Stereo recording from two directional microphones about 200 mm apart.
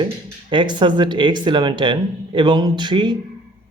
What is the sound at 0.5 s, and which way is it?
Speech, 25° right (ahead or behind).